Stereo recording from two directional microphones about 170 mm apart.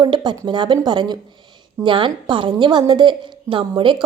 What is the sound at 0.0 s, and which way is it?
A woman's voice, 25° right (ahead or behind).